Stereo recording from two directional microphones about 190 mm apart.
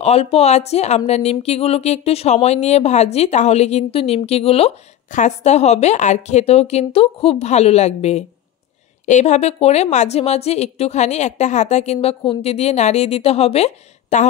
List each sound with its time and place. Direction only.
0.0 s speech: 35° left (ahead or behind)